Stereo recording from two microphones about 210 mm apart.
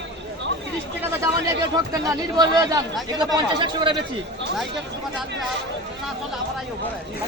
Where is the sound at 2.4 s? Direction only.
20° right (ahead or behind).